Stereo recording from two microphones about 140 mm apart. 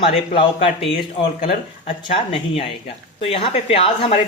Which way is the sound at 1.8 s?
40° left (ahead or behind).